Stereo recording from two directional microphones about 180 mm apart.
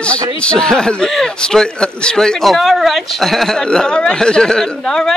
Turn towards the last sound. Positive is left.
turn(degrees=5)  # may be behind; listen again after turning